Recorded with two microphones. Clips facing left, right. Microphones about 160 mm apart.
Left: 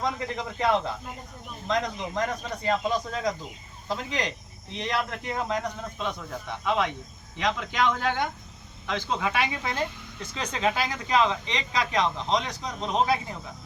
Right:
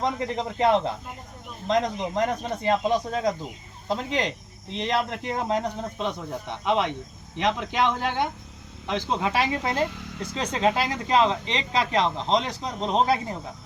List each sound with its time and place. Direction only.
0.0 s speech: 25° right (ahead or behind)